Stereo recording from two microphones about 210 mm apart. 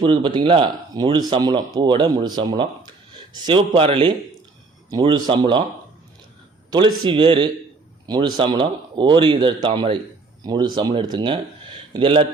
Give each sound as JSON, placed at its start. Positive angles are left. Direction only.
{"t": 0.0, "sound": "speech", "side_deg": -25}
{"t": 6.7, "sound": "speech", "side_deg": -20}